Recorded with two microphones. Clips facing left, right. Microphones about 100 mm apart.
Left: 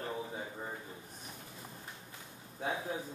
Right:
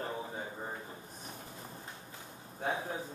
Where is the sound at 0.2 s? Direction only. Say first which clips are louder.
Right 1 dB; 30° right (ahead or behind).